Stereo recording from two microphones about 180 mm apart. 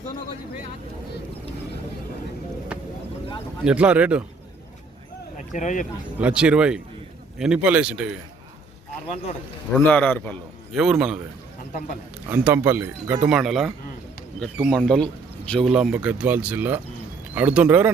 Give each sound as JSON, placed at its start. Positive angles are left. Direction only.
{"t": 3.6, "sound": "speech", "side_deg": -5}
{"t": 5.5, "sound": "speech", "side_deg": 45}
{"t": 6.1, "sound": "speech", "side_deg": -5}
{"t": 9.7, "sound": "a man's voice", "side_deg": 10}
{"t": 10.8, "sound": "speech", "side_deg": 0}
{"t": 12.3, "sound": "speech", "side_deg": -10}